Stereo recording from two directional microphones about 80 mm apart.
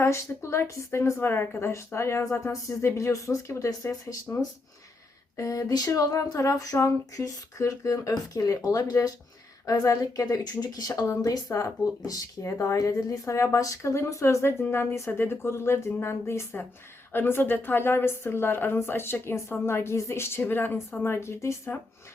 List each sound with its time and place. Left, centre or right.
0.0 s speech: left
2.4 s a woman's voice: left